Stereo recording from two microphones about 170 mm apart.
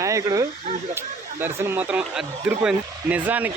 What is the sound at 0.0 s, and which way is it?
Speech, 20° right (ahead or behind).